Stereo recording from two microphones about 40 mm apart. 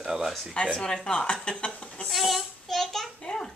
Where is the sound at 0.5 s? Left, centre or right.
Left.